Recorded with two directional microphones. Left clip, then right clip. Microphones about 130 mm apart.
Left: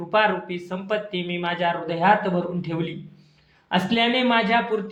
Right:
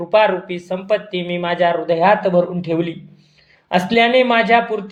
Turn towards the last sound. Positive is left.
turn(degrees=-30)  # may be behind; listen again after turning